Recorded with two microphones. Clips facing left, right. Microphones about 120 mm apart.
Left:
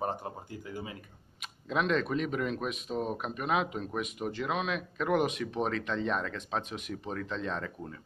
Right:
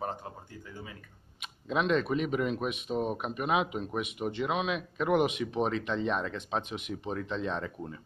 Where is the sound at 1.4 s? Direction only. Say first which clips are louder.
Right 1 dB; centre (ahead or behind).